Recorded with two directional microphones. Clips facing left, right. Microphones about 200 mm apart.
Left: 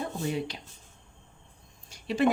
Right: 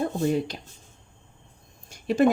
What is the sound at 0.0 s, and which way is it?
Speech, 45° right (ahead or behind).